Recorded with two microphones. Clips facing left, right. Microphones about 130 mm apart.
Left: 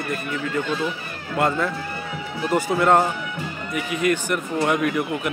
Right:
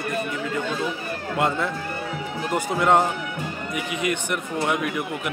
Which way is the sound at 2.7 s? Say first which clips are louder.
Even; 15° right (ahead or behind).